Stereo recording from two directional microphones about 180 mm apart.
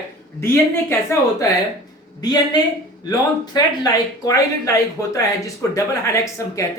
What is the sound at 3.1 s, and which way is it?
Speech, 20° left (ahead or behind).